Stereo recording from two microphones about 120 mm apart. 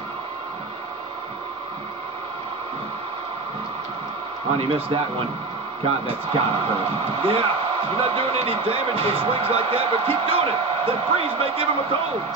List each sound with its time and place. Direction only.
4.6 s speech: 50° right (ahead or behind)
6.0 s speech: 50° right (ahead or behind)